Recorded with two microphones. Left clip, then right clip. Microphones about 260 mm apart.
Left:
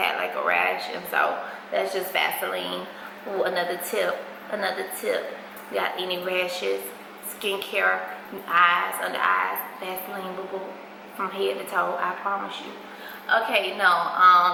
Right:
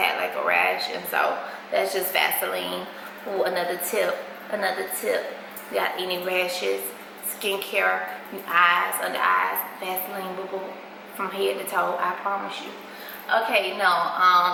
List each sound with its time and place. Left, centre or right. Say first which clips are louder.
0.0 s a sound: right 1 dB; centre
1.7 s a woman's voice: right 2 dB; centre
11.2 s a woman's voice: right 1 dB; centre